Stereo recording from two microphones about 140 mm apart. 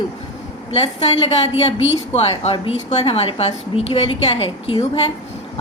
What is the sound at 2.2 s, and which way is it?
A woman's voice, 40° left (ahead or behind).